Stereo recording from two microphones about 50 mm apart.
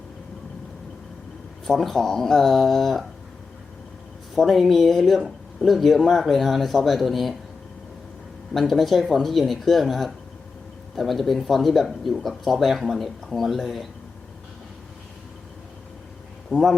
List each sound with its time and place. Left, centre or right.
1.6 s speech: centre
4.4 s speech: centre
8.5 s speech: centre
16.5 s speech: centre